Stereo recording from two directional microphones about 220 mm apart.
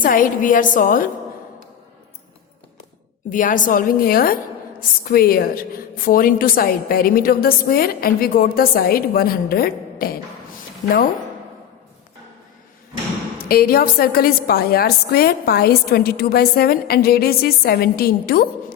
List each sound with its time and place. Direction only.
0.0 s a woman's voice: 40° left (ahead or behind)
3.2 s a woman's voice: 35° left (ahead or behind)
13.4 s a woman's voice: 45° left (ahead or behind)